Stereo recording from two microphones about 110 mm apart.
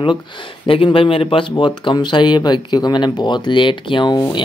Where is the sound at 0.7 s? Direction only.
55° left (ahead or behind).